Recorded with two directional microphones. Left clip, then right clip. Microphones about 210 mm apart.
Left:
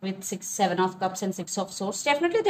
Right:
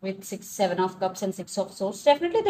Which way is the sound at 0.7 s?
35° left (ahead or behind).